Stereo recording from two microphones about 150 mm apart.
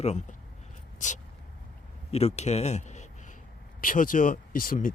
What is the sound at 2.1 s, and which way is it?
Speech, 45° left (ahead or behind).